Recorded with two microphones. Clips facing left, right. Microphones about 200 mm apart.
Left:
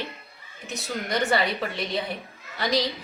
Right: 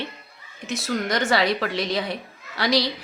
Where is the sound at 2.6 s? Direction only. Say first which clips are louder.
Right 3 dB; 75° right (ahead or behind).